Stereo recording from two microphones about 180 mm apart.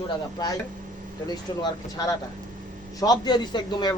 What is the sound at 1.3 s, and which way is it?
A man's voice, 20° left (ahead or behind).